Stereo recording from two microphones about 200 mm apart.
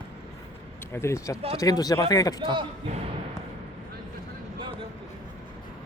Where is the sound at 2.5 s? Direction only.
25° right (ahead or behind).